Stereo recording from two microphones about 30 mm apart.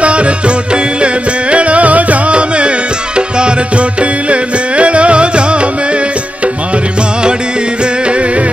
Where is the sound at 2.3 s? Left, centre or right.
Right.